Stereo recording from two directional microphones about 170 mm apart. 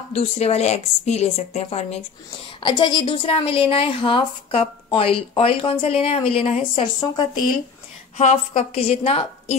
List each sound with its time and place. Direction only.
0.1 s a woman's voice: 40° left (ahead or behind)
7.0 s a woman's voice: 25° left (ahead or behind)
8.2 s a woman's voice: 40° left (ahead or behind)